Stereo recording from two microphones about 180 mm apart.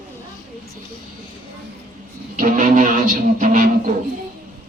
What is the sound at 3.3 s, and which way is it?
Speech, 45° right (ahead or behind).